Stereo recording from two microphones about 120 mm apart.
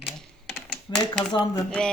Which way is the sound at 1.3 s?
35° left (ahead or behind).